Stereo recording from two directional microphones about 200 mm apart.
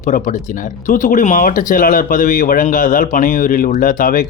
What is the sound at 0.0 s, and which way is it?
Speech, 40° left (ahead or behind).